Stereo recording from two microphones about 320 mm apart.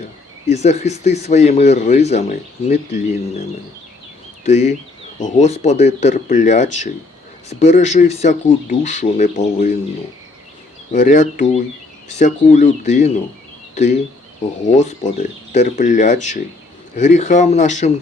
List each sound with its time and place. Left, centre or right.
0.4 s speech: left
4.4 s speech: left
10.9 s speech: left